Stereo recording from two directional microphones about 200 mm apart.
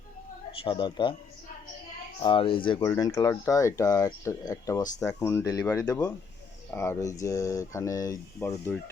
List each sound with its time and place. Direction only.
0.6 s speech: 25° left (ahead or behind)
2.2 s speech: 25° left (ahead or behind)